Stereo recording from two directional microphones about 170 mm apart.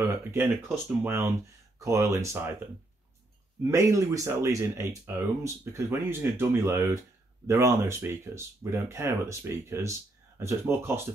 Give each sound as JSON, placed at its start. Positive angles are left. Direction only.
{"t": 0.7, "sound": "speech", "side_deg": -15}
{"t": 3.7, "sound": "speech", "side_deg": -20}